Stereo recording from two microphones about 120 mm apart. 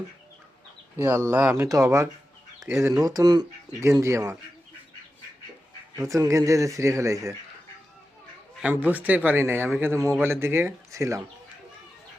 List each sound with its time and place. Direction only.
0.9 s speech: 15° right (ahead or behind)
6.0 s speech: 25° right (ahead or behind)
8.6 s speech: 15° right (ahead or behind)